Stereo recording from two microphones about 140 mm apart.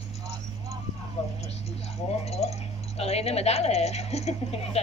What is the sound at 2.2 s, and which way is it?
Speech, 50° left (ahead or behind).